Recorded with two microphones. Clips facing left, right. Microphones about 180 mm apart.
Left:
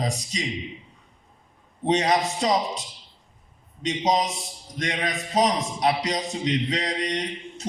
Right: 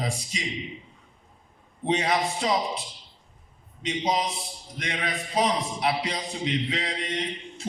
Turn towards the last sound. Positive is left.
turn(degrees=40)  # may be behind; listen again after turning